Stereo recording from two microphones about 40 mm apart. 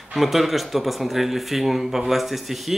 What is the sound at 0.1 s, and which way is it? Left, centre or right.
A man's voice, centre.